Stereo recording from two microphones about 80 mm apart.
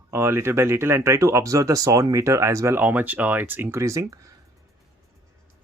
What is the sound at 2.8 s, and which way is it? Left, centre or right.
Speech, right.